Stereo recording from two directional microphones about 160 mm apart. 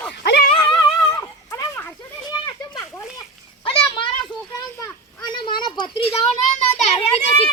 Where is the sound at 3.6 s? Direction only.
35° left (ahead or behind).